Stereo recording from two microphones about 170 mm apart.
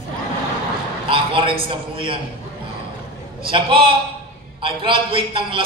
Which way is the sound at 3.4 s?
30° right (ahead or behind).